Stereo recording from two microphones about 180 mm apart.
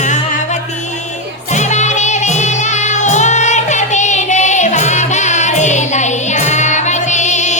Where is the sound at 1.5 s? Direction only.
40° left (ahead or behind).